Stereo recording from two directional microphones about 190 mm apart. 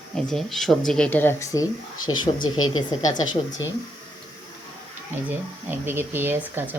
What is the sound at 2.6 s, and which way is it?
Speech, 90° left.